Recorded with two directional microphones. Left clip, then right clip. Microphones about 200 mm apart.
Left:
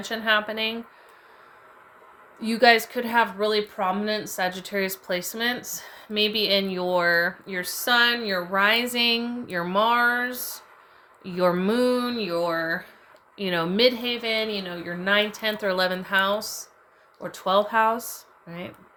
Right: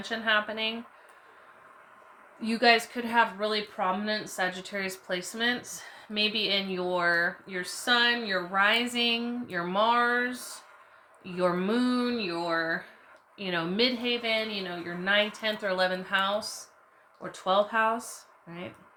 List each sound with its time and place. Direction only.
0.0 s speech: 55° left (ahead or behind)
2.4 s speech: 45° left (ahead or behind)